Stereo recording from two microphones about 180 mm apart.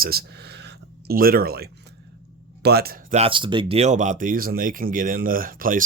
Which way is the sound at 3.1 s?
30° right (ahead or behind).